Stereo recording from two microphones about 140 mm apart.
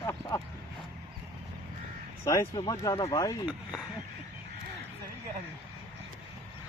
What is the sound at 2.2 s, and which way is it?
Speech, 30° left (ahead or behind).